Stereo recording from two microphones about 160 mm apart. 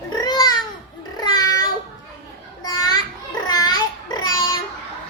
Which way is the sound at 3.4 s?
25° left (ahead or behind).